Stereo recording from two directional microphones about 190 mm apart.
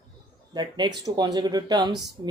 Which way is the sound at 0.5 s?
20° right (ahead or behind).